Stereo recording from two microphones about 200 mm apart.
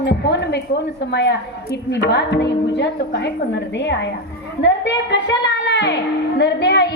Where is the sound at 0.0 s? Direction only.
60° left (ahead or behind).